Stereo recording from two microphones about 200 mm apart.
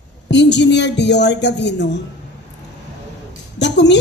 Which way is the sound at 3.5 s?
60° left (ahead or behind).